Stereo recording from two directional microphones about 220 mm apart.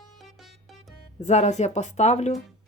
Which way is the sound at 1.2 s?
30° left (ahead or behind).